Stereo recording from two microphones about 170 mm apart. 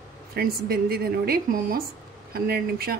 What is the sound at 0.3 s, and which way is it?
A woman's voice, 65° right (ahead or behind).